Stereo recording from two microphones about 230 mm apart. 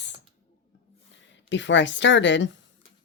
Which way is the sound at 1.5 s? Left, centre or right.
Left.